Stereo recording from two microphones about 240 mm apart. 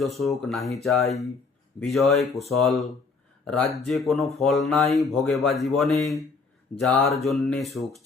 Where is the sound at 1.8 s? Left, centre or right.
Centre.